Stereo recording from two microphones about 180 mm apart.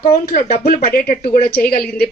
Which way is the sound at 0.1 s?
55° left (ahead or behind).